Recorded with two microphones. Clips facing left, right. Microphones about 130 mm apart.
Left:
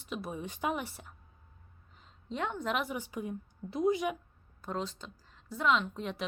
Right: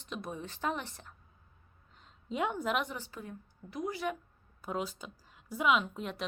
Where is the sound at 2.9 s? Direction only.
15° left (ahead or behind).